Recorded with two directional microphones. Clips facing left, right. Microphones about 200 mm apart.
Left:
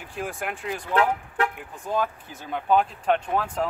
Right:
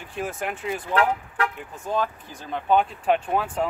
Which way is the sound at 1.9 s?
5° left (ahead or behind).